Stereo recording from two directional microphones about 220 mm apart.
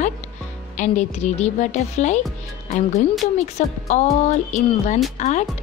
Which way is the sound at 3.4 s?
30° left (ahead or behind).